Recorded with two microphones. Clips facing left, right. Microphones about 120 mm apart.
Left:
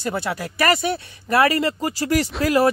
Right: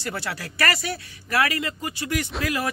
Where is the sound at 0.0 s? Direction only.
20° left (ahead or behind).